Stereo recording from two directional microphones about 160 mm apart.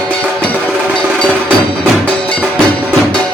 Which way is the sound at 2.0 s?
5° left (ahead or behind).